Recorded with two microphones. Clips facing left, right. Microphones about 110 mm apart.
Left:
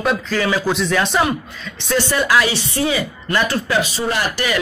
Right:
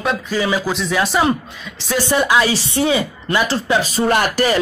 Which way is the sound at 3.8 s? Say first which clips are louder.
Right 4 dB; 50° right (ahead or behind).